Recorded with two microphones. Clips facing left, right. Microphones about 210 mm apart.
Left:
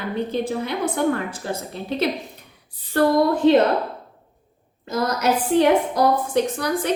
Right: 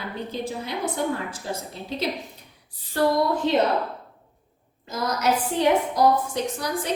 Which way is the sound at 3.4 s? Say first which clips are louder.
Left 10 dB; 60° left (ahead or behind).